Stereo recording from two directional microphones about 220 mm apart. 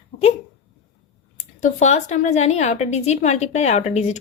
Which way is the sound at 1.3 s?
35° left (ahead or behind).